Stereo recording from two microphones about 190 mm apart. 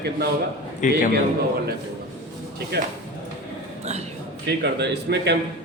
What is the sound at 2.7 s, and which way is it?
Speech, 60° right (ahead or behind).